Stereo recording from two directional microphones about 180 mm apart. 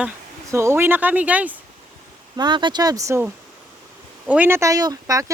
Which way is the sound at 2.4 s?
25° right (ahead or behind).